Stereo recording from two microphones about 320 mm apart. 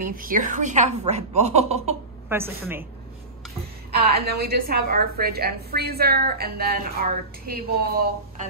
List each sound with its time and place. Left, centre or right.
0.0 s a woman's voice: right
2.2 s a woman's voice: centre
3.9 s a woman's voice: right